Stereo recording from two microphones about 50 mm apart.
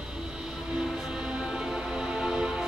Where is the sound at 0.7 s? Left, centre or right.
Centre.